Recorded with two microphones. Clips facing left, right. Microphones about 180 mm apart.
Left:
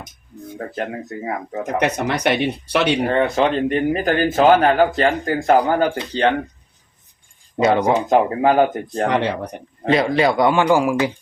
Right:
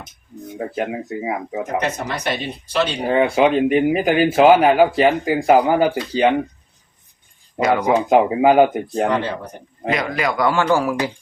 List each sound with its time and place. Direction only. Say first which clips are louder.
0.5 s speech: right 3 dB; 10° right (ahead or behind)
1.8 s speech: left 4 dB; 65° left (ahead or behind)
3.1 s speech: right 2 dB; 10° right (ahead or behind)
7.6 s a man's voice: left 1 dB; 25° left (ahead or behind)
8.1 s speech: right 3 dB; 10° right (ahead or behind)
9.0 s speech: left 4 dB; 70° left (ahead or behind)
9.9 s a man's voice: left 5 dB; 30° left (ahead or behind); by 10.9 s 15° left (ahead or behind)